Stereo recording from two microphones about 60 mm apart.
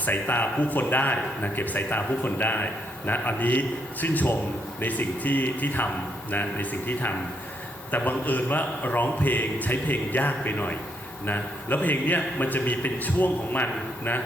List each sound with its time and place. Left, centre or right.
0.0 s a man's voice: left